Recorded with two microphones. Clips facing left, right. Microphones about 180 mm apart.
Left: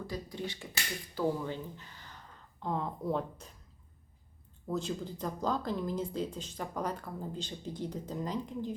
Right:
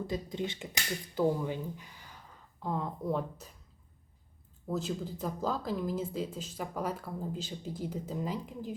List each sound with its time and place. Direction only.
0.1 s speech: 20° right (ahead or behind); by 3.5 s 5° right (ahead or behind)
4.7 s speech: 5° right (ahead or behind)